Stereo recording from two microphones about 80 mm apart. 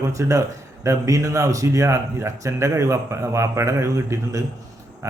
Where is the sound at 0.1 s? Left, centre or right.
Right.